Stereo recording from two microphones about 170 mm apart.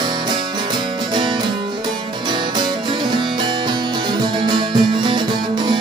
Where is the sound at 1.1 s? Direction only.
25° right (ahead or behind).